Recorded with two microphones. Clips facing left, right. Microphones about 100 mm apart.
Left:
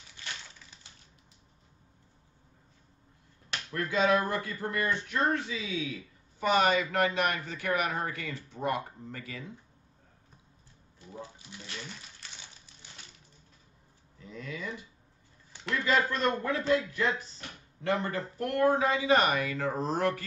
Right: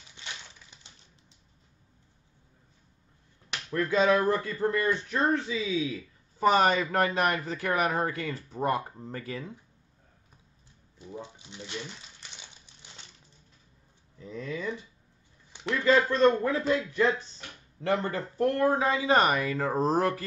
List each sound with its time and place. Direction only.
0.2 s typewriter: 20° right (ahead or behind)
3.7 s speech: 35° right (ahead or behind)
11.0 s speech: 20° right (ahead or behind)
14.2 s speech: 35° right (ahead or behind)
15.8 s speech: 30° right (ahead or behind)